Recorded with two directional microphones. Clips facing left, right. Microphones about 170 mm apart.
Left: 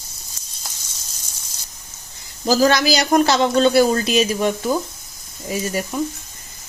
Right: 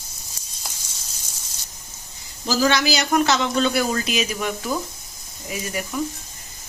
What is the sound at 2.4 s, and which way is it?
A man's voice, 40° left (ahead or behind).